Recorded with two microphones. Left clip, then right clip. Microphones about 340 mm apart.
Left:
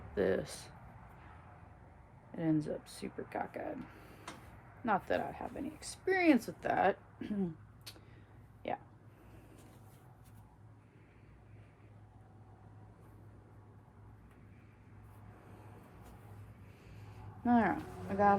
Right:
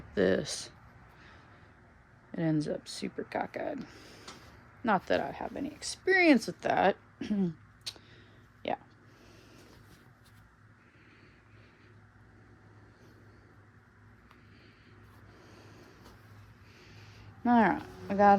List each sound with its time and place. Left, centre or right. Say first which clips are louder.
0.1 s speech: right 5 dB; right
2.3 s speech: right 3 dB; right
7.9 s a sound: right 11 dB; right
8.6 s speech: right 5 dB; right
17.4 s speech: right 5 dB; right